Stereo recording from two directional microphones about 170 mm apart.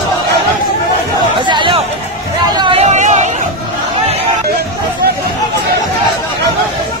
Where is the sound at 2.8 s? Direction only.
45° right (ahead or behind).